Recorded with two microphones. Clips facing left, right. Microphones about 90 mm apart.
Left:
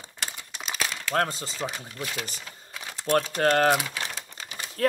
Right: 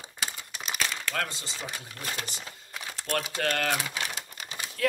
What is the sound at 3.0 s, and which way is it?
Speech, 30° left (ahead or behind).